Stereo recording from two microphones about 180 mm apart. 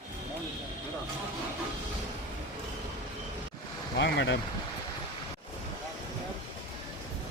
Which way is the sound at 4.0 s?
80° left.